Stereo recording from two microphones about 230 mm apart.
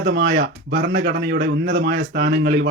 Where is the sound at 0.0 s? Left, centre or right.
Right.